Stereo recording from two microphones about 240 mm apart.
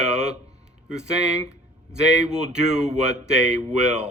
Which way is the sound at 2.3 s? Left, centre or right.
Right.